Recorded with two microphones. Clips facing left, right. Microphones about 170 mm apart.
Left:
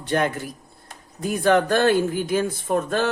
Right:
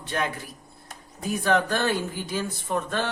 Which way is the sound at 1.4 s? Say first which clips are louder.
Left 6 dB; 55° left (ahead or behind).